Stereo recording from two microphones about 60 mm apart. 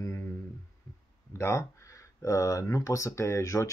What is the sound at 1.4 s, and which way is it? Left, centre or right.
Speech, left.